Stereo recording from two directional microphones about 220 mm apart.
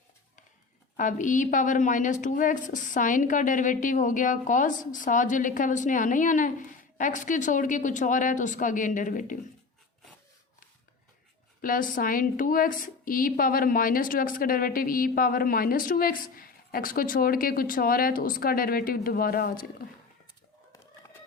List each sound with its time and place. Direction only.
0.9 s a woman's voice: 35° left (ahead or behind)
11.6 s a woman's voice: 40° left (ahead or behind)